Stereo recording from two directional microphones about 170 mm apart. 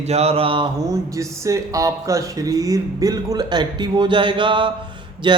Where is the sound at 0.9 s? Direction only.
20° right (ahead or behind).